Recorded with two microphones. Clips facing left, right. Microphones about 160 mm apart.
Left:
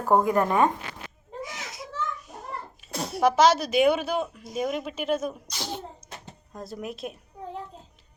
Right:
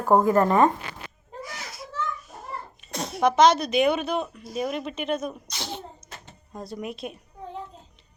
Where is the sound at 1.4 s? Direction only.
20° left (ahead or behind).